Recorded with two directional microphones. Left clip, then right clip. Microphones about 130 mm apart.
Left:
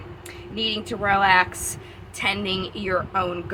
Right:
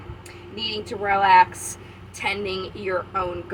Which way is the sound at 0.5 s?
50° left (ahead or behind).